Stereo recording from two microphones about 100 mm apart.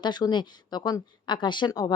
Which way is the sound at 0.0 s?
45° left (ahead or behind).